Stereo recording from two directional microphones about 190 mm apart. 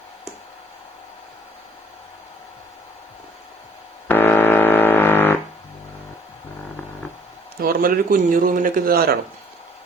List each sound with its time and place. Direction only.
4.1 s music: 10° left (ahead or behind)
7.6 s speech: 50° right (ahead or behind)